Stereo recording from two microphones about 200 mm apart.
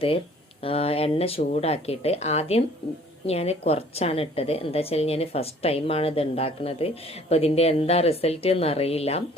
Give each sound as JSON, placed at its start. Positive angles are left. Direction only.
{"t": 0.6, "sound": "a woman's voice", "side_deg": 30}